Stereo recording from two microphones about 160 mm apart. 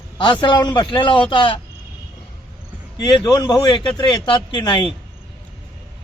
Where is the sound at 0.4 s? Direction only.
25° left (ahead or behind).